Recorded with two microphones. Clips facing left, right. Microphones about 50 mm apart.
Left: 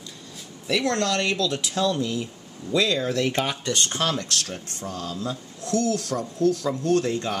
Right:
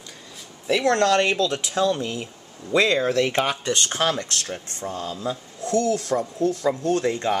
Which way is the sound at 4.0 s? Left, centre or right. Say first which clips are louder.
Right 2 dB; right.